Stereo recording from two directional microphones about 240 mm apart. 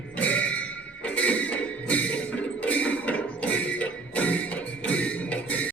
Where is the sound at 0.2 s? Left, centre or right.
Centre.